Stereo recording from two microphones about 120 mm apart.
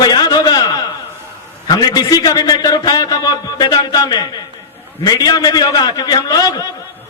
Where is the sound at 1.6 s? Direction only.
35° left (ahead or behind).